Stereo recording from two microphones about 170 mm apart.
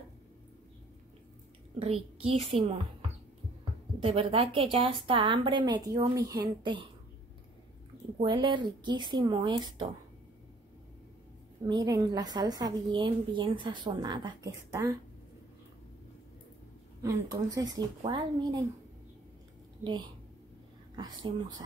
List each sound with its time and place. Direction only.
1.8 s a woman's voice: 35° right (ahead or behind)
4.0 s a woman's voice: 30° right (ahead or behind)
8.2 s a woman's voice: 25° right (ahead or behind)
11.6 s a woman's voice: 25° right (ahead or behind)
17.0 s a woman's voice: 20° right (ahead or behind)
19.8 s a woman's voice: 25° right (ahead or behind)